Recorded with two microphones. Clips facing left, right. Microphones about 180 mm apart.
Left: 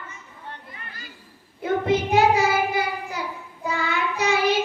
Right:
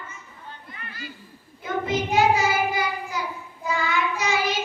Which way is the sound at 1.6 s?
60° left (ahead or behind).